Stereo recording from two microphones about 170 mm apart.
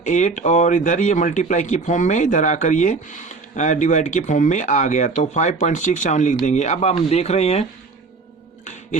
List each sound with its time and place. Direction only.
0.0 s speech: 45° left (ahead or behind)